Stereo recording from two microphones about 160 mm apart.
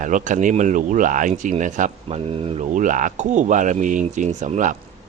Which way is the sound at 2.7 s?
55° right (ahead or behind).